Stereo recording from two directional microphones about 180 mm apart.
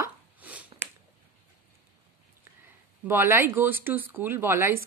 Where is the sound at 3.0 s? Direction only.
10° right (ahead or behind).